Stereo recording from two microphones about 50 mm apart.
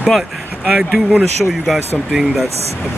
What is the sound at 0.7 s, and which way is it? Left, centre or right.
Speech, centre.